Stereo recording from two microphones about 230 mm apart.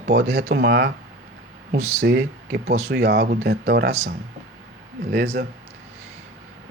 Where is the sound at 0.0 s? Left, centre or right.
Right.